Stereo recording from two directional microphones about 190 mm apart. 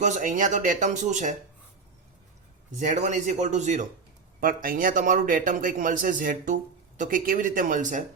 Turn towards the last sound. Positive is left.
turn(degrees=-45)  # may be behind; listen again after turning